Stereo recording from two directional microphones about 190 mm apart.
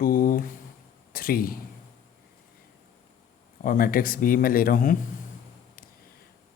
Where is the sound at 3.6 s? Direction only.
45° left (ahead or behind).